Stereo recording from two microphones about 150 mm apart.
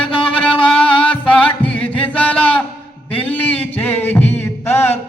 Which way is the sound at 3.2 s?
10° left (ahead or behind).